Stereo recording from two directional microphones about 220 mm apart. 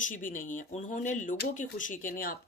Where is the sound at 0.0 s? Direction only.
40° left (ahead or behind).